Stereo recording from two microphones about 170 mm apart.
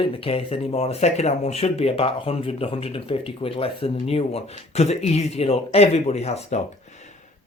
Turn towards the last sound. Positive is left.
turn(degrees=40)  # may be behind; listen again after turning